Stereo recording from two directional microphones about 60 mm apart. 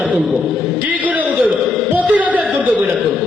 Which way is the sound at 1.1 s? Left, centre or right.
Right.